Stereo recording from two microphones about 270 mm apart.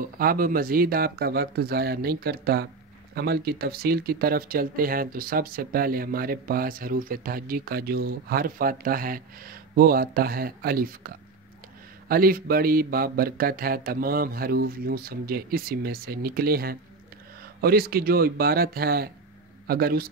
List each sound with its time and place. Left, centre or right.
0.0 s speech: right